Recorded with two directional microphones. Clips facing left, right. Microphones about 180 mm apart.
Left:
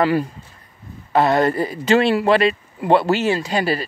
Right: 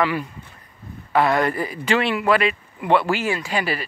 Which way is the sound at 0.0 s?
35° left (ahead or behind).